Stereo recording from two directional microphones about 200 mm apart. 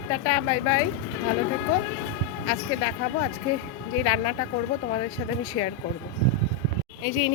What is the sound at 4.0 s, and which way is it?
Speech, 35° left (ahead or behind).